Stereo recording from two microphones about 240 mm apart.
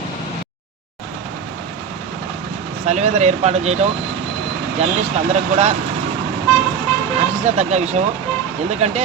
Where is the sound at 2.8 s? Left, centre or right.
Right.